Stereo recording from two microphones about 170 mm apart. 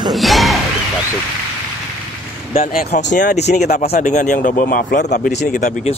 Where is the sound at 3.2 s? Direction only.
45° left (ahead or behind).